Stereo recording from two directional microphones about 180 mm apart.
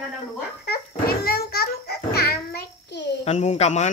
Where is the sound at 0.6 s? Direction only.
55° left (ahead or behind).